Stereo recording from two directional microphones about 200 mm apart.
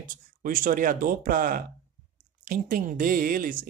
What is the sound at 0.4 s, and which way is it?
Speech, 45° right (ahead or behind).